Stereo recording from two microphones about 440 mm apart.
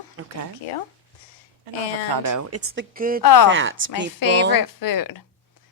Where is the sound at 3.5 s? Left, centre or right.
Right.